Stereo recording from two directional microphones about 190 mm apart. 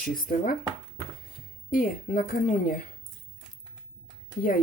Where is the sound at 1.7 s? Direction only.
50° left (ahead or behind).